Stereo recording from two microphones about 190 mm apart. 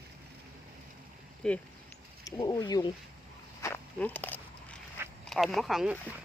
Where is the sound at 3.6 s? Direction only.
10° left (ahead or behind).